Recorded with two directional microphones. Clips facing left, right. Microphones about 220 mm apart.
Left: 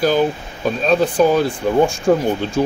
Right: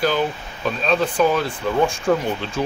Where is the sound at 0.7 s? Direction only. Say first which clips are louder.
Left 4 dB; 40° left (ahead or behind).